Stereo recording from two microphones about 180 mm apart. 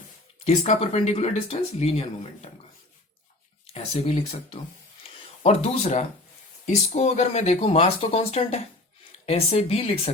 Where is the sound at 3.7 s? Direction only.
30° left (ahead or behind).